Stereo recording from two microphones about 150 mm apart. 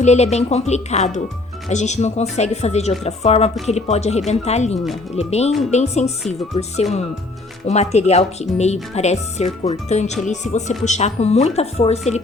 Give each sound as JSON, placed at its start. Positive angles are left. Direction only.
{"t": 0.0, "sound": "speech", "side_deg": 50}
{"t": 7.7, "sound": "speech", "side_deg": 45}